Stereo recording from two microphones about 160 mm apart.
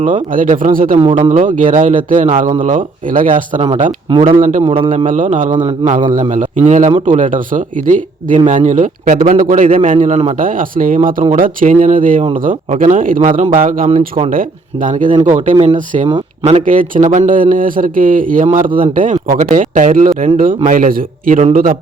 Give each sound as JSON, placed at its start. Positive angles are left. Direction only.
{"t": 0.0, "sound": "a man's voice", "side_deg": -50}
{"t": 4.6, "sound": "a man's voice", "side_deg": -35}
{"t": 5.0, "sound": "a man's voice", "side_deg": -50}
{"t": 10.4, "sound": "a man's voice", "side_deg": -60}
{"t": 15.5, "sound": "a man's voice", "side_deg": -30}
{"t": 16.4, "sound": "a man's voice", "side_deg": -45}